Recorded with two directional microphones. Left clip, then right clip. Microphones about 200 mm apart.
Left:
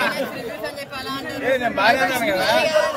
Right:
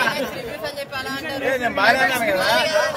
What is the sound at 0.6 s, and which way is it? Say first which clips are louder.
Speech: right 2 dB; 35° right (ahead or behind).